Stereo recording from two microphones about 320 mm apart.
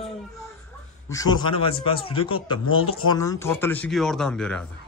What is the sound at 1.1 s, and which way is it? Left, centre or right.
A man's voice, centre.